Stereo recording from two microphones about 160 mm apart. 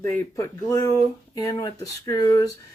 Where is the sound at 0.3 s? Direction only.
20° left (ahead or behind).